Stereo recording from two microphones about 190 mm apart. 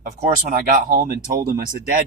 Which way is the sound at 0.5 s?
45° right (ahead or behind).